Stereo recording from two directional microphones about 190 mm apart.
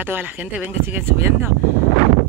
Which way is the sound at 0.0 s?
10° right (ahead or behind).